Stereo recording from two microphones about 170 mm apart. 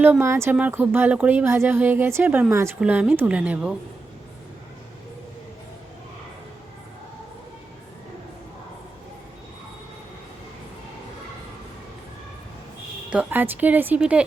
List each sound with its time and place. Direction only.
0.0 s speech: 15° right (ahead or behind)
13.1 s speech: 10° right (ahead or behind)